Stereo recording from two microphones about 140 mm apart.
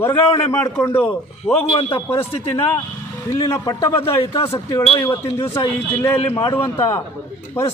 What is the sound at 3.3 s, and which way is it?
Speech, 20° left (ahead or behind).